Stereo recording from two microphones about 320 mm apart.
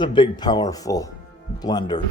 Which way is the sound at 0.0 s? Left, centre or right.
Centre.